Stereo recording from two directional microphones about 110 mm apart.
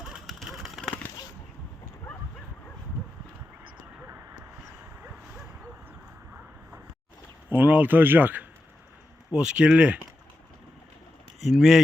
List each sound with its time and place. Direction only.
0.0 s a sound: 5° right (ahead or behind)
7.5 s a man's voice: 15° right (ahead or behind)
11.4 s speech: centre (ahead or behind)